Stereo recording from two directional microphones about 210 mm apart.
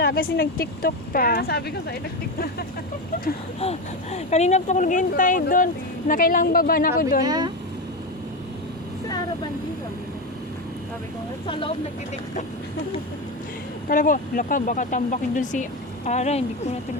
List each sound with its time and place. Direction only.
0.0 s speech: 45° left (ahead or behind)
3.6 s speech: 30° left (ahead or behind)
7.3 s speech: 20° right (ahead or behind)
13.8 s speech: 40° left (ahead or behind)